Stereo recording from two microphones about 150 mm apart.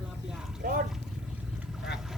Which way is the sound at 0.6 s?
70° right (ahead or behind).